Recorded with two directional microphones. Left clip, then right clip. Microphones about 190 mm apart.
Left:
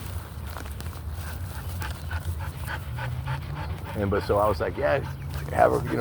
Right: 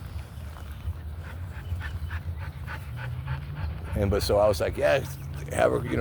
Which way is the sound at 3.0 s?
30° left (ahead or behind).